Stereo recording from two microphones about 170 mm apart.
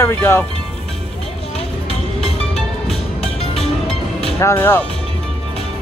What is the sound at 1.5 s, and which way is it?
Music, 35° left (ahead or behind).